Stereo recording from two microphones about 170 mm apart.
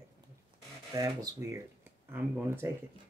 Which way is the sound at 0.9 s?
20° right (ahead or behind).